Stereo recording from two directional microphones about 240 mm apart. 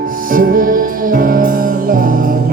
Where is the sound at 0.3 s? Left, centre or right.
Right.